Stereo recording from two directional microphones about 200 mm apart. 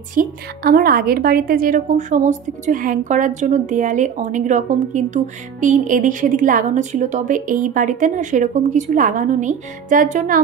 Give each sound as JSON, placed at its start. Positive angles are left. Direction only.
{"t": 0.1, "sound": "a woman's voice", "side_deg": -45}